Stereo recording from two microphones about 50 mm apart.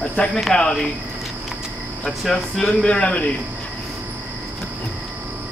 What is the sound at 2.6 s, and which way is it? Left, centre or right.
Speech, left.